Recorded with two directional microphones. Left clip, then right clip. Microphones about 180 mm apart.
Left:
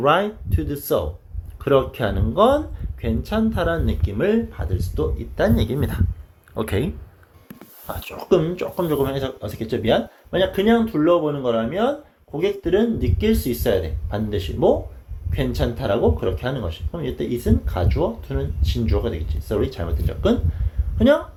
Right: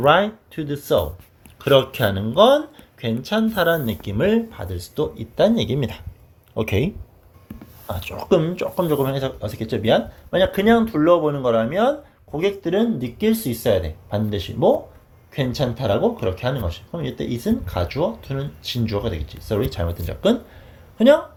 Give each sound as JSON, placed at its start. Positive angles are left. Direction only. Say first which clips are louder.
{"t": 0.0, "sound": "speech", "louder": "right 2 dB", "side_deg": -30}
{"t": 7.9, "sound": "speech", "louder": "even", "side_deg": -35}